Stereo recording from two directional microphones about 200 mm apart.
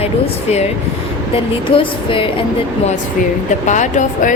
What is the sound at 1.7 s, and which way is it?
Speech, 25° left (ahead or behind).